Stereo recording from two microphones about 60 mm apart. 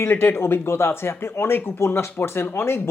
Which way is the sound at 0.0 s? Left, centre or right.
Left.